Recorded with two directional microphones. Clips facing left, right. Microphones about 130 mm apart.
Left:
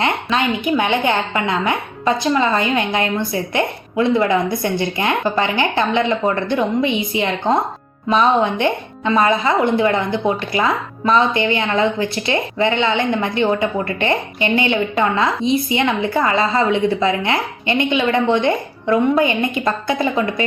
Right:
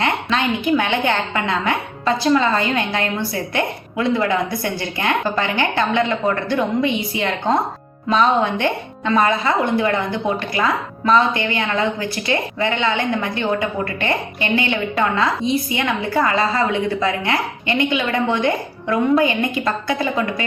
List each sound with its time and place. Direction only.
0.0 s speech: 20° left (ahead or behind)